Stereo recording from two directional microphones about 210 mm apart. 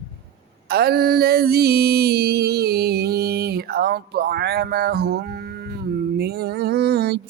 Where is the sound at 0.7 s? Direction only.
50° right (ahead or behind).